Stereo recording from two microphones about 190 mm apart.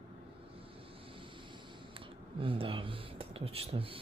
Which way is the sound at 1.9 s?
30° right (ahead or behind).